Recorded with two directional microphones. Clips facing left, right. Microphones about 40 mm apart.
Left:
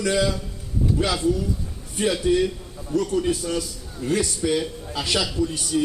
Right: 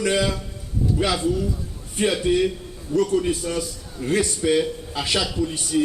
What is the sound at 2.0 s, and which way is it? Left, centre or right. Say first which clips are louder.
A man's voice: right 1 dB; right.